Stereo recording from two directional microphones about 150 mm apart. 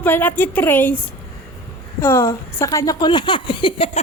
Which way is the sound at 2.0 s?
20° left (ahead or behind).